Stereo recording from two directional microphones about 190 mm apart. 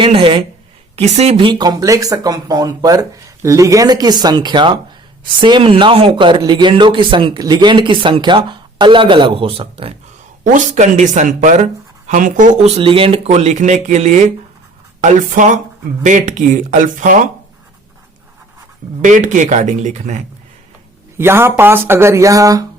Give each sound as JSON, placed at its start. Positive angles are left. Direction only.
{"t": 0.0, "sound": "speech", "side_deg": -30}
{"t": 19.0, "sound": "speech", "side_deg": -40}
{"t": 21.2, "sound": "speech", "side_deg": -15}